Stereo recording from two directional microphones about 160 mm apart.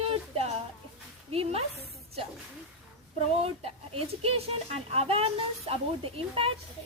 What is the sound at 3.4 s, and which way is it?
A woman's voice, 35° right (ahead or behind).